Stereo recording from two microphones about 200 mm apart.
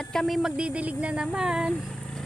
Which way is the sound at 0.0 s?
5° left (ahead or behind).